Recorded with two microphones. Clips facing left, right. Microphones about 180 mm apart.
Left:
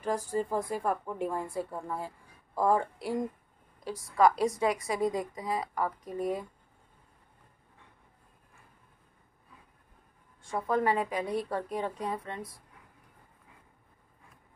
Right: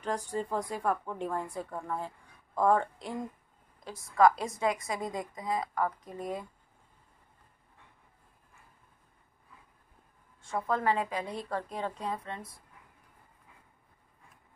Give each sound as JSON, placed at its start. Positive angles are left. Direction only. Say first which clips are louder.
{"t": 0.0, "sound": "a woman's voice", "louder": "left 3 dB", "side_deg": 5}
{"t": 10.4, "sound": "a woman's voice", "louder": "left 2 dB", "side_deg": 10}